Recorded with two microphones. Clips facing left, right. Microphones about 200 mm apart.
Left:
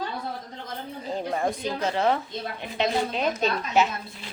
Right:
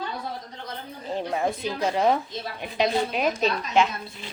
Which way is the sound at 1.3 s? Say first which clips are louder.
Even; 5° right (ahead or behind).